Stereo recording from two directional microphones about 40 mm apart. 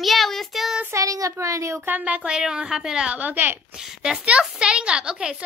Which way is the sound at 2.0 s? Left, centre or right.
Right.